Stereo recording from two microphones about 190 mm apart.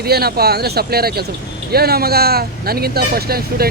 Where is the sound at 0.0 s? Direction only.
55° right (ahead or behind).